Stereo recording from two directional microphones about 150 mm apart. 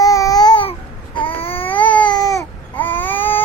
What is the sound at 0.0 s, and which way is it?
Babbling, 25° left (ahead or behind).